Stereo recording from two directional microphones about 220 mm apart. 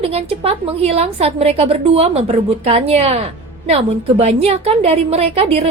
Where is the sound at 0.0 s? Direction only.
25° right (ahead or behind).